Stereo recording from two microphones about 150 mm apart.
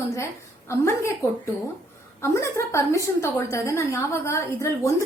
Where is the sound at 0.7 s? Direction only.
15° left (ahead or behind).